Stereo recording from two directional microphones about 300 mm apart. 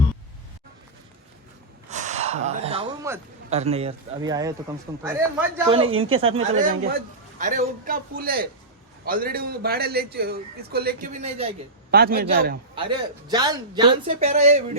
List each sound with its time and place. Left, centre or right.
1.9 s gasp: right
3.5 s a man's voice: right
11.9 s a man's voice: right
12.7 s a man's voice: centre